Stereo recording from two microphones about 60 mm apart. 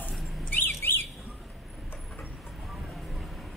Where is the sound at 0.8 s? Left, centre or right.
Left.